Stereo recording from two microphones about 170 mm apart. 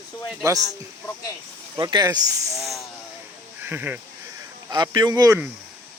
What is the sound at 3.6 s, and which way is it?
Speech, 10° right (ahead or behind).